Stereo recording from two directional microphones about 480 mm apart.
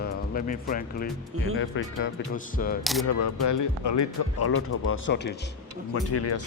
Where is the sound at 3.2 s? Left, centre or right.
Left.